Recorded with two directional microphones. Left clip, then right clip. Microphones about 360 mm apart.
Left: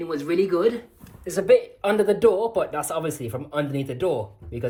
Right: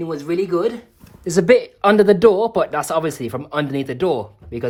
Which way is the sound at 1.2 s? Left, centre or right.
Centre.